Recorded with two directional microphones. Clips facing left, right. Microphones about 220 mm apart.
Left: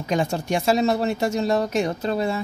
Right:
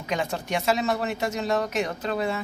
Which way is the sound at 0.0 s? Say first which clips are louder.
Left 5 dB; 30° left (ahead or behind).